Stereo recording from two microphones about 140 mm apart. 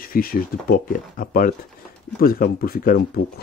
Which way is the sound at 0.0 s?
90° left.